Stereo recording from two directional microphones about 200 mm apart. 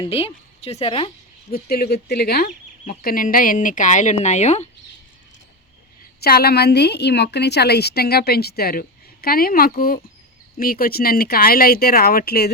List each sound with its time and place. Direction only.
0.0 s a woman's voice: 30° left (ahead or behind)
1.5 s a woman's voice: 50° left (ahead or behind); by 4.7 s 35° left (ahead or behind)
6.2 s a woman's voice: 50° left (ahead or behind)